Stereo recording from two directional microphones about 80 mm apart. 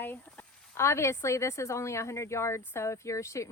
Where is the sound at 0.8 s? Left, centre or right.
Left.